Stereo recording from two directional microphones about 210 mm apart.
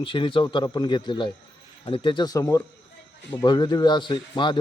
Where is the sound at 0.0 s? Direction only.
25° left (ahead or behind).